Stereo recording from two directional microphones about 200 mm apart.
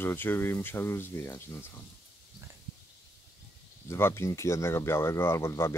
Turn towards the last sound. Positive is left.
turn(degrees=15)  # may be behind; listen again after turning